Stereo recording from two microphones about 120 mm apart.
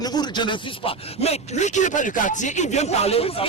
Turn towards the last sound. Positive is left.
turn(degrees=55)  # may be behind; listen again after turning